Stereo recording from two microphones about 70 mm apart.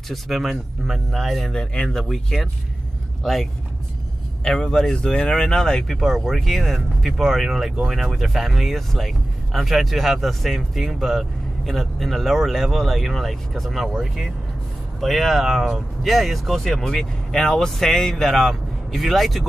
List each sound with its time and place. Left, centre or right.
0.1 s speech: centre
4.5 s speech: centre